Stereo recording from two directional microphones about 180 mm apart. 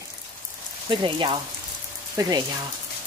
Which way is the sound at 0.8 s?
25° right (ahead or behind).